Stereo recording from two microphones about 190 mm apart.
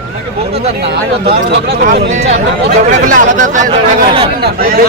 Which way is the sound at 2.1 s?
35° right (ahead or behind).